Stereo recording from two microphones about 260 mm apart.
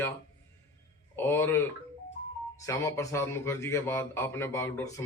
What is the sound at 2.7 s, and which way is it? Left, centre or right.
A man's voice, centre.